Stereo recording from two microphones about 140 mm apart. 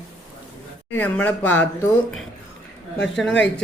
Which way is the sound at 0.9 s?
10° left (ahead or behind).